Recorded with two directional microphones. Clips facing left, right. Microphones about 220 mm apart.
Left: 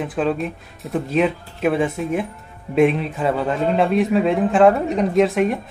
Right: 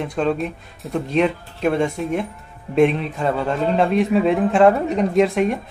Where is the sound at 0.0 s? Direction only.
5° left (ahead or behind).